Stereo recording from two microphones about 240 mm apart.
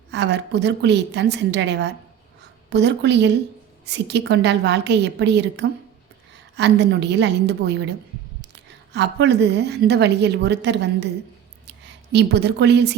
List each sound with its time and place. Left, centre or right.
0.1 s a woman's voice: right
8.9 s a woman's voice: right
12.1 s a woman's voice: right